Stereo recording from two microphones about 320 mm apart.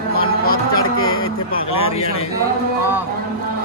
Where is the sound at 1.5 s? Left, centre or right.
Centre.